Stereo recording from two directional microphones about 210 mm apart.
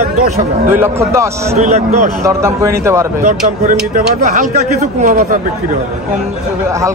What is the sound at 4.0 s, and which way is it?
Speech, 35° right (ahead or behind).